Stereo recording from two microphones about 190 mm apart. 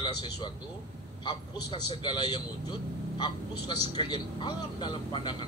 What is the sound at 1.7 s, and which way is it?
Speech, 30° right (ahead or behind).